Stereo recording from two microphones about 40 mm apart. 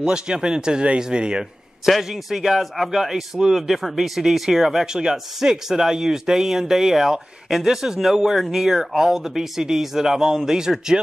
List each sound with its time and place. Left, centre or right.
0.0 s speech: right
1.9 s speech: centre